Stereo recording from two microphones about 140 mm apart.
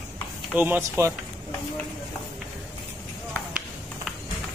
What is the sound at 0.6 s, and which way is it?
Speech, 15° right (ahead or behind).